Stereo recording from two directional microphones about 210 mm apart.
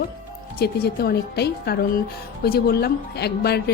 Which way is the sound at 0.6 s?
50° left (ahead or behind).